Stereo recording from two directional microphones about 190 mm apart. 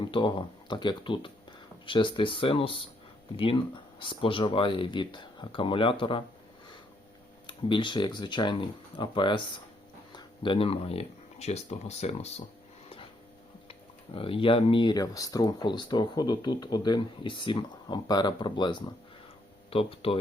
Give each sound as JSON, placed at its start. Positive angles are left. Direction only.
{"t": 0.0, "sound": "speech", "side_deg": 25}
{"t": 7.4, "sound": "speech", "side_deg": 25}
{"t": 13.7, "sound": "speech", "side_deg": 30}